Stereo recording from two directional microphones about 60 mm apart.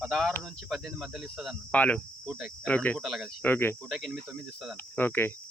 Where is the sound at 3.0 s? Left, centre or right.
Centre.